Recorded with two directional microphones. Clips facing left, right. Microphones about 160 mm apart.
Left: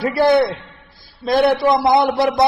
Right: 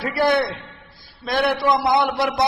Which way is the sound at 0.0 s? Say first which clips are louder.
Left 5 dB; 30° left (ahead or behind).